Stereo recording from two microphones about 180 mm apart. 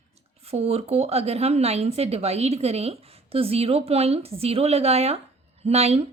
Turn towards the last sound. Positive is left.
turn(degrees=-35)  # may be behind; listen again after turning